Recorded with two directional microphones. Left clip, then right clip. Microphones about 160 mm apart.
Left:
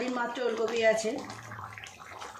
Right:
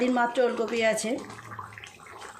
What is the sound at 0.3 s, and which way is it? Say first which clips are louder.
Speech: right 4 dB; 55° right (ahead or behind).